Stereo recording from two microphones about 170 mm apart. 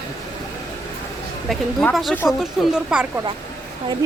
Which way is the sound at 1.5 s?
Centre (ahead or behind).